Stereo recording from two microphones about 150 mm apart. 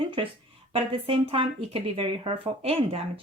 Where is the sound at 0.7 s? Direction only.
40° right (ahead or behind).